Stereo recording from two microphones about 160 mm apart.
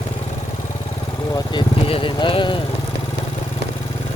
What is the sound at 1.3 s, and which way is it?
Speech, 20° left (ahead or behind).